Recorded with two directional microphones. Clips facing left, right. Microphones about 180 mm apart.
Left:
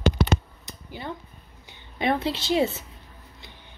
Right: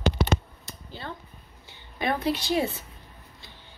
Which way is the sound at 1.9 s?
25° left (ahead or behind).